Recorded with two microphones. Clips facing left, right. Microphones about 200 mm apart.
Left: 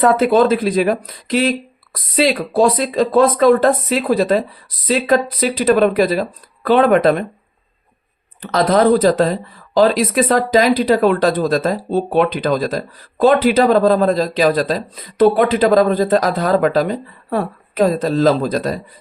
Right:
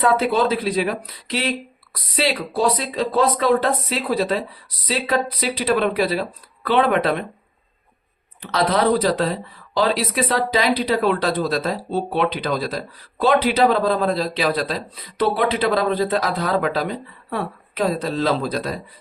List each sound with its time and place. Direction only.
0.0 s speech: 45° left (ahead or behind)
8.4 s speech: 45° left (ahead or behind)